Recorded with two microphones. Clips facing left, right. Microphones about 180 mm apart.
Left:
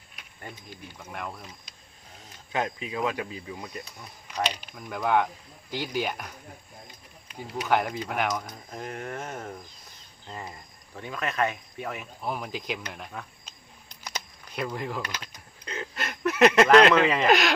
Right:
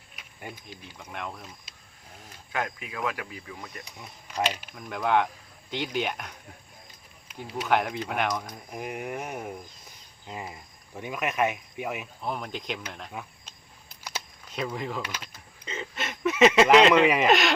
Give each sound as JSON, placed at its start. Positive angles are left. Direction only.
{"t": 0.3, "sound": "speech", "side_deg": -5}
{"t": 2.5, "sound": "speech", "side_deg": 25}
{"t": 3.9, "sound": "speech", "side_deg": -5}
{"t": 7.5, "sound": "speech", "side_deg": 0}
{"t": 8.7, "sound": "speech", "side_deg": -15}
{"t": 12.2, "sound": "speech", "side_deg": 5}
{"t": 13.1, "sound": "speech", "side_deg": -10}
{"t": 14.0, "sound": "a sound", "side_deg": -5}
{"t": 17.2, "sound": "speech", "side_deg": 0}